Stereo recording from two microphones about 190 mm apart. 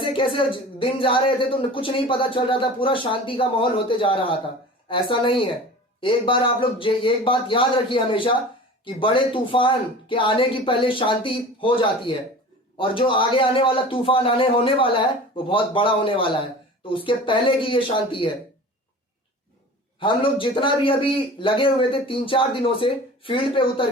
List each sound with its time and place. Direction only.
0.0 s speech: 25° left (ahead or behind)
20.0 s speech: 25° left (ahead or behind)